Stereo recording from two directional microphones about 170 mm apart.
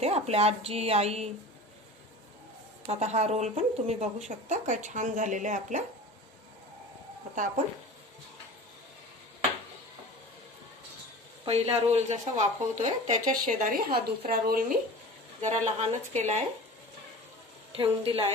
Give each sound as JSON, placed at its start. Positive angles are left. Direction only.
{"t": 0.0, "sound": "a woman's voice", "side_deg": -35}
{"t": 2.8, "sound": "speech", "side_deg": -40}
{"t": 11.4, "sound": "speech", "side_deg": -35}
{"t": 15.4, "sound": "speech", "side_deg": -40}
{"t": 17.7, "sound": "a woman's voice", "side_deg": -35}